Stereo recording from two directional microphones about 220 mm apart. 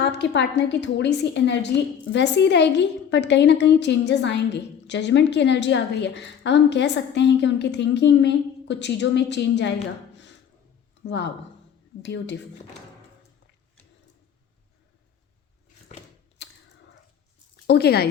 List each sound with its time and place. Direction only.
0.0 s a woman's voice: 50° left (ahead or behind)
11.0 s a woman's voice: 50° left (ahead or behind)
16.4 s a sound: 50° left (ahead or behind)
17.7 s a woman's voice: 45° left (ahead or behind)